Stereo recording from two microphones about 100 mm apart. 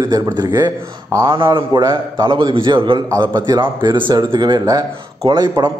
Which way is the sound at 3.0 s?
35° right (ahead or behind).